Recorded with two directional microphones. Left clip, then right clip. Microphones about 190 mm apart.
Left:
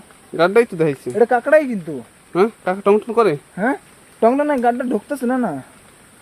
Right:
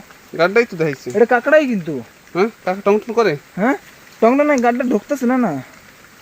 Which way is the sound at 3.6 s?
45° right (ahead or behind).